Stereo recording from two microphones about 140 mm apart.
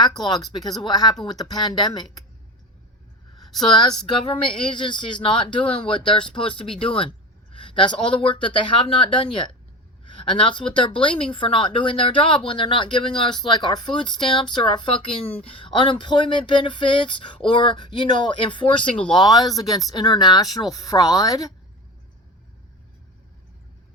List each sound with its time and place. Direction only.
1.2 s speech: 30° left (ahead or behind)
3.4 s a sound: centre (ahead or behind)
4.3 s speech: 35° left (ahead or behind)